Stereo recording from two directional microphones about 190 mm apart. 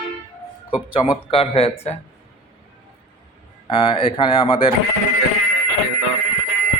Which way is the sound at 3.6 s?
25° left (ahead or behind).